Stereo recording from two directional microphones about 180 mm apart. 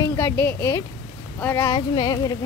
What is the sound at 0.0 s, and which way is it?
Speech, 15° left (ahead or behind).